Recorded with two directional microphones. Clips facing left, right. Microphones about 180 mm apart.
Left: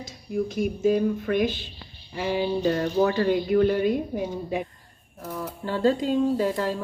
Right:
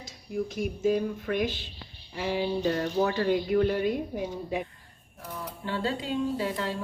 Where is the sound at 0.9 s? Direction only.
60° left (ahead or behind).